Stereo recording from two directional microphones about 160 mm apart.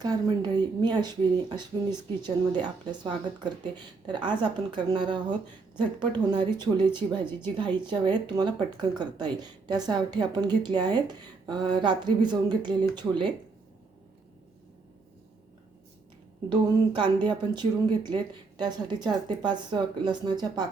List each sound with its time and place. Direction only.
0.0 s speech: 25° right (ahead or behind)
16.5 s speech: 30° right (ahead or behind)